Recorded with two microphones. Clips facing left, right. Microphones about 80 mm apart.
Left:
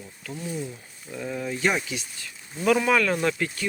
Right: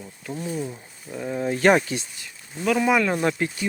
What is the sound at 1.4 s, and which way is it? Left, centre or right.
Speech, right.